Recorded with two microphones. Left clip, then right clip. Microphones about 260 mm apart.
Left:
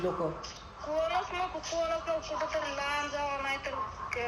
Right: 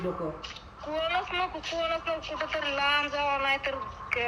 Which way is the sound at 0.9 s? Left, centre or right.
Centre.